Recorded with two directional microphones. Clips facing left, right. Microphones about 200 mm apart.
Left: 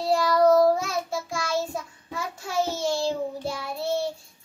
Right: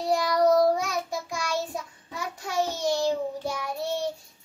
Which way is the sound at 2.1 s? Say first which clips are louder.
Left 1 dB; 15° right (ahead or behind).